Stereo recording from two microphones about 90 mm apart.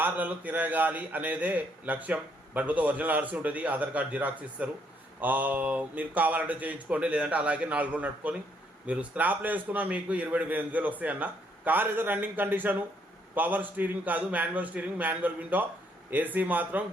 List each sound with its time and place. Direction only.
0.0 s a man's voice: 20° right (ahead or behind)